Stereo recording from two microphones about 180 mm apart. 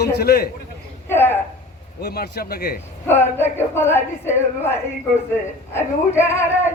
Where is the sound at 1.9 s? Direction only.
60° left (ahead or behind).